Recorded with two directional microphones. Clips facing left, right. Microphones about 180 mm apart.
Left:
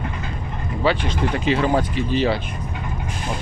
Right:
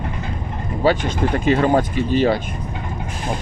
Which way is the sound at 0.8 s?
45° right (ahead or behind).